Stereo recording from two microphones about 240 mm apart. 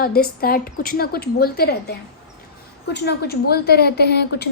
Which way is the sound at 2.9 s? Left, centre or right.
Left.